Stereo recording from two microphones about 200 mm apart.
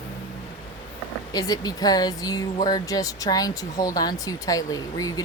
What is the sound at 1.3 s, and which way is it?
A woman's voice, 20° left (ahead or behind).